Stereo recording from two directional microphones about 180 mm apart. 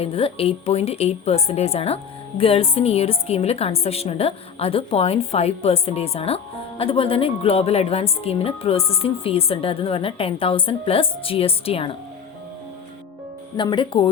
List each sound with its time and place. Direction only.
0.0 s a woman's voice: 30° left (ahead or behind)
13.6 s speech: 25° left (ahead or behind)